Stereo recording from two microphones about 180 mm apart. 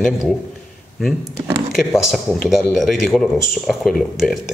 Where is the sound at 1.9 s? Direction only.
Centre (ahead or behind).